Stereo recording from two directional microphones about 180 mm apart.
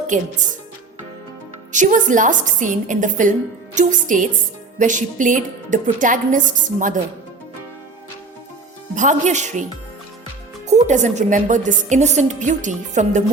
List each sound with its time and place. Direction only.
0.1 s a woman's voice: 45° right (ahead or behind)
1.7 s a woman's voice: 45° right (ahead or behind)
9.0 s a woman's voice: 40° right (ahead or behind)
10.7 s a woman's voice: 40° right (ahead or behind)